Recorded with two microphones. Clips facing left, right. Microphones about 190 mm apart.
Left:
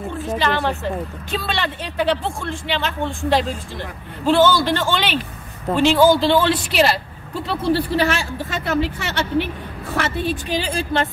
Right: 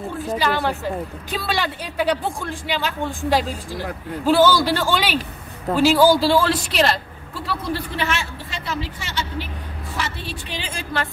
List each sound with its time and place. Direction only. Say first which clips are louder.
0.3 s speech: left 1 dB; 5° right (ahead or behind)
7.4 s speech: left 6 dB; 30° left (ahead or behind); by 9.5 s 65° left (ahead or behind)
9.9 s a woman's voice: left 8 dB; 45° left (ahead or behind); by 11.1 s 25° left (ahead or behind)